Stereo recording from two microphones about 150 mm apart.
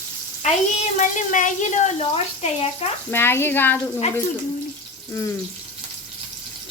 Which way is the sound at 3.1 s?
15° left (ahead or behind).